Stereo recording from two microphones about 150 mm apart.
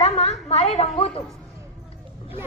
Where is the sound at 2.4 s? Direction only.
15° right (ahead or behind).